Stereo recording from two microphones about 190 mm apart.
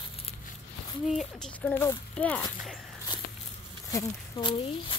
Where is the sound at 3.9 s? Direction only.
25° left (ahead or behind).